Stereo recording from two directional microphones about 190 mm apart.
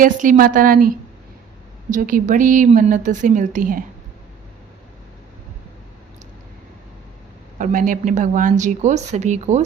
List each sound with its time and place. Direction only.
0.0 s a woman's voice: 45° right (ahead or behind)
7.6 s a woman's voice: 45° right (ahead or behind)